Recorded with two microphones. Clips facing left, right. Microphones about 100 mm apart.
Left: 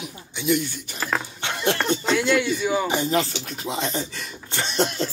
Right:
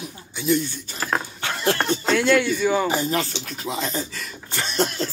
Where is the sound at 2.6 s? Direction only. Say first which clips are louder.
Right 2 dB; 45° right (ahead or behind).